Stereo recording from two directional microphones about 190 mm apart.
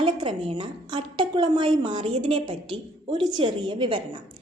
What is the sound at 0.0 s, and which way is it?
A woman's voice, 25° right (ahead or behind).